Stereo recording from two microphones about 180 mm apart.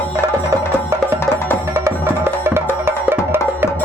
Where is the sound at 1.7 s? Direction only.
15° right (ahead or behind).